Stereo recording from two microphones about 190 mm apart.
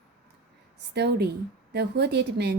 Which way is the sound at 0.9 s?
60° right (ahead or behind).